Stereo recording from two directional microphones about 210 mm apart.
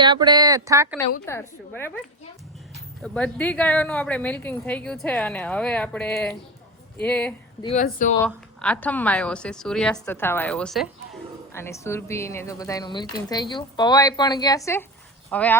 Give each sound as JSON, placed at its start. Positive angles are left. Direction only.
{"t": 0.0, "sound": "speech", "side_deg": -20}
{"t": 1.3, "sound": "a woman's voice", "side_deg": 10}
{"t": 3.0, "sound": "a woman's voice", "side_deg": 5}
{"t": 7.8, "sound": "speech", "side_deg": 40}
{"t": 8.2, "sound": "a woman's voice", "side_deg": 5}
{"t": 11.5, "sound": "a woman's voice", "side_deg": 10}